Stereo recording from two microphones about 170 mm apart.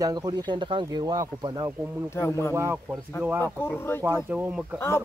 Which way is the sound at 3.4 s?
10° left (ahead or behind).